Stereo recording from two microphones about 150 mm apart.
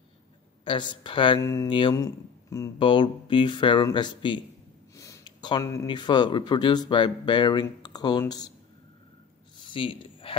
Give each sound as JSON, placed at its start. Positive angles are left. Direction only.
{"t": 0.7, "sound": "speech", "side_deg": 35}
{"t": 1.4, "sound": "speech", "side_deg": 20}
{"t": 1.7, "sound": "speech", "side_deg": 35}
{"t": 2.0, "sound": "speech", "side_deg": 20}
{"t": 2.8, "sound": "speech", "side_deg": 35}
{"t": 4.9, "sound": "a sound", "side_deg": 20}
{"t": 5.6, "sound": "speech", "side_deg": 20}
{"t": 5.9, "sound": "speech", "side_deg": 30}
{"t": 9.7, "sound": "a sound", "side_deg": 35}